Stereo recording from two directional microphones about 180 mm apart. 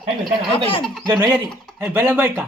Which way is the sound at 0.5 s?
25° left (ahead or behind).